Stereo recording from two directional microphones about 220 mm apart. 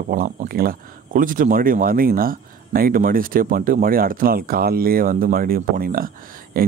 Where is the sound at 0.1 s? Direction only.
40° right (ahead or behind).